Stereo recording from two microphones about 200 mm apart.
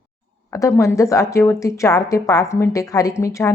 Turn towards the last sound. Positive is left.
turn(degrees=15)  # may be behind; listen again after turning